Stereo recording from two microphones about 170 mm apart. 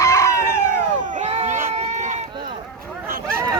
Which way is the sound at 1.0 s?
45° right (ahead or behind).